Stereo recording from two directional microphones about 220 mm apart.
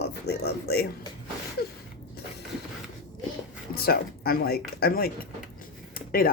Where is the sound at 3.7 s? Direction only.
45° left (ahead or behind).